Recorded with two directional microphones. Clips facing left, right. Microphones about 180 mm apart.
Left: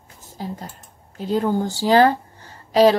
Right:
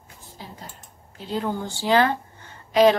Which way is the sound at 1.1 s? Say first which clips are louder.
Left 7 dB; 45° left (ahead or behind).